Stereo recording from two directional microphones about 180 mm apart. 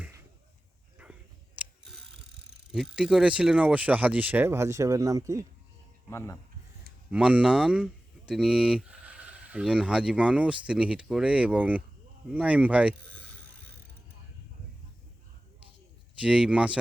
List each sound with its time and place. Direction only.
1.5 s mechanisms: centre (ahead or behind)
2.7 s speech: 5° right (ahead or behind)
6.1 s speech: 15° left (ahead or behind)
7.1 s speech: 5° right (ahead or behind)
16.2 s speech: 5° right (ahead or behind)